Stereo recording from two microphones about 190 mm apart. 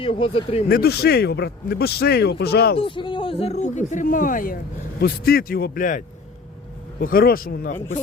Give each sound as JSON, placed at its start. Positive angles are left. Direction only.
{"t": 0.0, "sound": "speech", "side_deg": 30}
{"t": 0.7, "sound": "a man's voice", "side_deg": 55}
{"t": 2.7, "sound": "a man's voice", "side_deg": 25}
{"t": 7.0, "sound": "a man's voice", "side_deg": 50}